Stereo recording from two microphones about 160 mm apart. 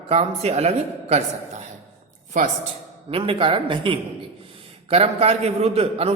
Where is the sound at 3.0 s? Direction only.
35° right (ahead or behind).